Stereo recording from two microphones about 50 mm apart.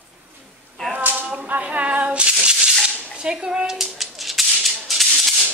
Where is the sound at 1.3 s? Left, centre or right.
Right.